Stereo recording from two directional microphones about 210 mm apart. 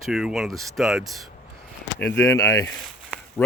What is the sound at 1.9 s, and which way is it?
Speech, 10° left (ahead or behind).